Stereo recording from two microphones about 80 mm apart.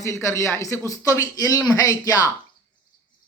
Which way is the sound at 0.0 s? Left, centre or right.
Left.